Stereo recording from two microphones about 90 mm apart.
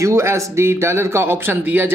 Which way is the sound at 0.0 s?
30° right (ahead or behind).